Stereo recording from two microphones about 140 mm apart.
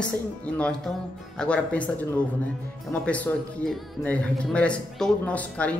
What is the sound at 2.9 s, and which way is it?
Speech, 10° left (ahead or behind).